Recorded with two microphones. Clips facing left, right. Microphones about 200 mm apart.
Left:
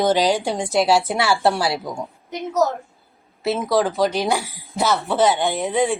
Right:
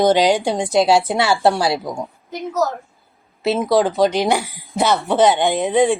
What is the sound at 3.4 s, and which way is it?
Speech, 25° right (ahead or behind).